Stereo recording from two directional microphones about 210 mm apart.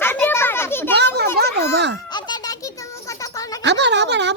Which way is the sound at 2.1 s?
20° left (ahead or behind).